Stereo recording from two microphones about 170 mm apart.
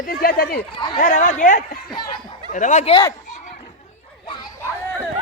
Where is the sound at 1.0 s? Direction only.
50° left (ahead or behind).